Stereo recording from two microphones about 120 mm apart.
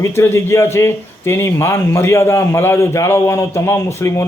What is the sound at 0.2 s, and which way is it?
A man's voice, 20° left (ahead or behind).